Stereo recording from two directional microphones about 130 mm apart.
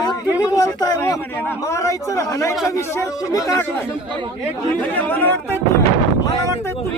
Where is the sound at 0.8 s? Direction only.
25° left (ahead or behind).